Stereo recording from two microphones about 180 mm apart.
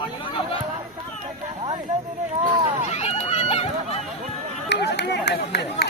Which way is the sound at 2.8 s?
35° left (ahead or behind).